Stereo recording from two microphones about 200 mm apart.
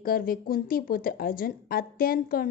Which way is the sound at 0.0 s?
45° left (ahead or behind).